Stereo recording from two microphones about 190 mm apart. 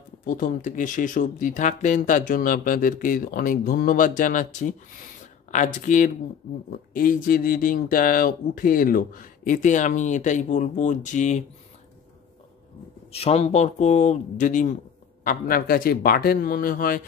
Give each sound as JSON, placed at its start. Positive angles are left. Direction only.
{"t": 0.2, "sound": "speech", "side_deg": 45}
{"t": 13.1, "sound": "speech", "side_deg": 30}